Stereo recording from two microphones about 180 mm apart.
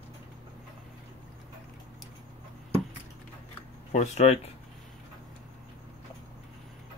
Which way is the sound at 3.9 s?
40° left (ahead or behind).